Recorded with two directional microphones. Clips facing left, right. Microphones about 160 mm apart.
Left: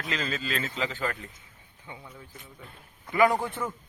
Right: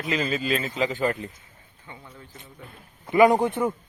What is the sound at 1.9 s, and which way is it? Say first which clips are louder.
Speech: even; 10° left (ahead or behind).